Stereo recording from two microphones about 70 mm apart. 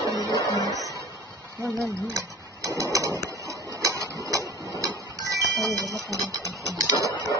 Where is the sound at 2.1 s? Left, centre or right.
Right.